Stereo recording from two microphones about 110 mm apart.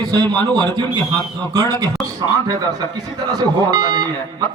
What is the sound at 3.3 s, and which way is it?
Speech, 35° right (ahead or behind).